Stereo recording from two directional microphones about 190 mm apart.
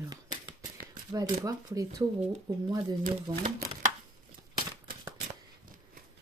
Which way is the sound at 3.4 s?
40° right (ahead or behind).